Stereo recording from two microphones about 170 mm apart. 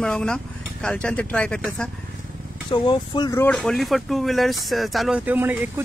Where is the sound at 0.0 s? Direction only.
5° left (ahead or behind).